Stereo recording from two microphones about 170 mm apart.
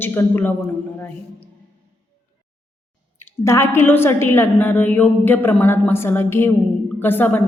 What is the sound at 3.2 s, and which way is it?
A woman's voice, 15° left (ahead or behind).